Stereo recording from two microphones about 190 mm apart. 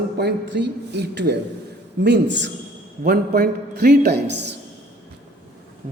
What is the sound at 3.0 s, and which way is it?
A man's voice, 55° right (ahead or behind).